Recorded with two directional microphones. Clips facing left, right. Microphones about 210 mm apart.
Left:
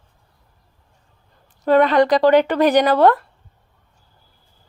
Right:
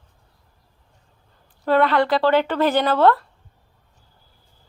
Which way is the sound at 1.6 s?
15° left (ahead or behind).